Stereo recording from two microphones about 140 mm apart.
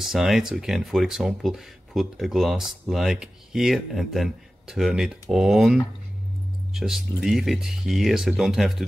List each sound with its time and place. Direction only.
0.0 s speech: centre (ahead or behind)